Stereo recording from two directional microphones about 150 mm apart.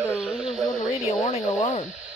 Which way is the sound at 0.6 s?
25° left (ahead or behind).